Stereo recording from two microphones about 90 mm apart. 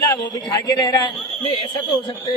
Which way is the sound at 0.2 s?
55° left (ahead or behind).